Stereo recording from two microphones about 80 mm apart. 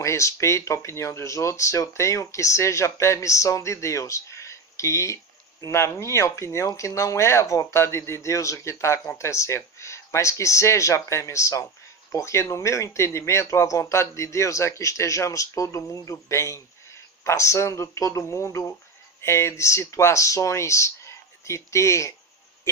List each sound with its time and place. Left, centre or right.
0.0 s speech: left